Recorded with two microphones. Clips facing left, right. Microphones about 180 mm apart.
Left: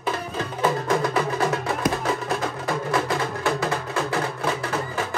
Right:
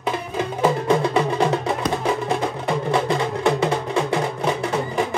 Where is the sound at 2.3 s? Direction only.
20° right (ahead or behind).